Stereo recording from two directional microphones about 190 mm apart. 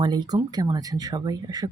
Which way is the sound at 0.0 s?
20° right (ahead or behind).